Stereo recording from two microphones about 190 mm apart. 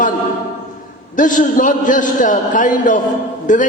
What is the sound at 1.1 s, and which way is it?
A man's voice, 40° left (ahead or behind).